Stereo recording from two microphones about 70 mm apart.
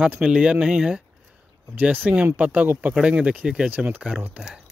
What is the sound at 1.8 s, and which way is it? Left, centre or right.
Speech, right.